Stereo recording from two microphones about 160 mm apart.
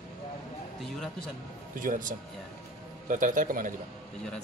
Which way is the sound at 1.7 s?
55° right (ahead or behind).